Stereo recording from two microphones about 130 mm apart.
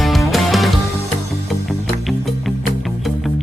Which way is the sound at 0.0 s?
Centre (ahead or behind).